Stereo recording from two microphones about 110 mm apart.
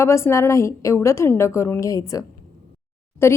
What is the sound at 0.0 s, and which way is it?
A woman's voice, 25° left (ahead or behind).